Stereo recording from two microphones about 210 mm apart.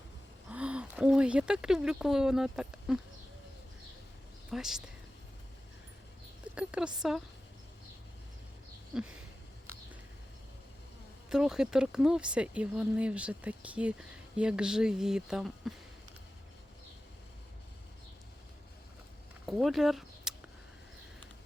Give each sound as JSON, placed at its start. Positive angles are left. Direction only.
{"t": 0.5, "sound": "speech", "side_deg": -5}
{"t": 4.5, "sound": "speech", "side_deg": 0}
{"t": 6.5, "sound": "speech", "side_deg": -5}
{"t": 8.9, "sound": "speech", "side_deg": -5}
{"t": 11.3, "sound": "speech", "side_deg": -5}
{"t": 19.5, "sound": "speech", "side_deg": 0}